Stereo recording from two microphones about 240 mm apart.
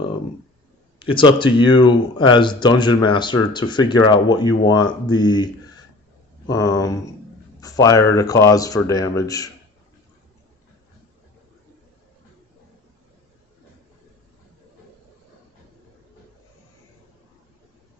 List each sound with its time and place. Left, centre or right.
0.9 s speech: left
6.5 s speech: centre